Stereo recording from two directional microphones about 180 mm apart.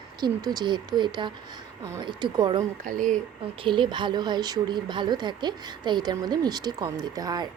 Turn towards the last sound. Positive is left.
turn(degrees=-20)  # may be behind; listen again after turning